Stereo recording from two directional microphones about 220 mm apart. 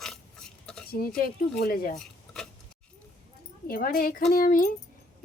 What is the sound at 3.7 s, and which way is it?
Speech, 40° left (ahead or behind).